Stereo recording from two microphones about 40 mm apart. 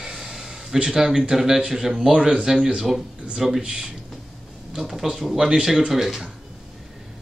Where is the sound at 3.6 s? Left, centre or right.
Centre.